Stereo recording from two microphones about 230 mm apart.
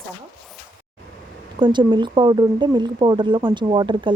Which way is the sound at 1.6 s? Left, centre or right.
Right.